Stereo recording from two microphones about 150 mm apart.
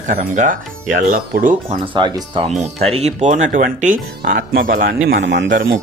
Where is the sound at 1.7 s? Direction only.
30° right (ahead or behind).